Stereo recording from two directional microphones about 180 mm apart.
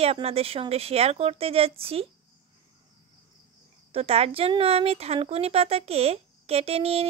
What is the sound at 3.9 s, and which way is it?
Speech, 35° right (ahead or behind).